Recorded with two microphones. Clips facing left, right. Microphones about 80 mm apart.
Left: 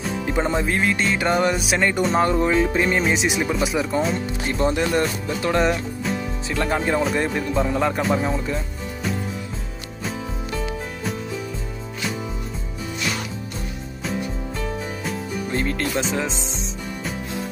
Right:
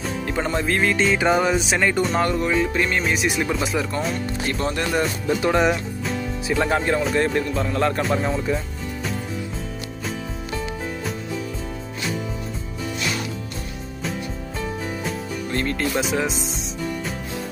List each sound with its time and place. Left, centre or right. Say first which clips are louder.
0.3 s music: left 1 dB; centre
2.1 s speech: left 2 dB; left
5.6 s music: right 1 dB; centre
6.8 s speech: even; centre
15.5 s speech: even; centre
15.8 s music: right 1 dB; centre